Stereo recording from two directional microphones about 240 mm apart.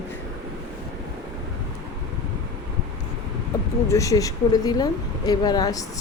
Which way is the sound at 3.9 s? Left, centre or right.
Centre.